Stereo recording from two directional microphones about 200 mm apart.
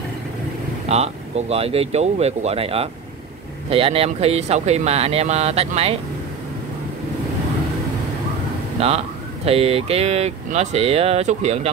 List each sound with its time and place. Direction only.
0.8 s speech: 30° right (ahead or behind)
8.7 s speech: 30° right (ahead or behind)